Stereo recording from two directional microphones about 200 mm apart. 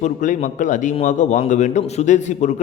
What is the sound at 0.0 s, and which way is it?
A man's voice, 35° left (ahead or behind).